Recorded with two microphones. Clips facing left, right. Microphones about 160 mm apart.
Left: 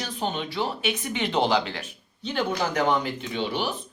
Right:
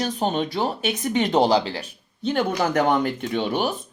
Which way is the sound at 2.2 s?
50° right (ahead or behind).